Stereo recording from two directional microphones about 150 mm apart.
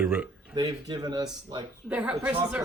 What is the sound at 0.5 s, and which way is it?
Speech, 30° right (ahead or behind).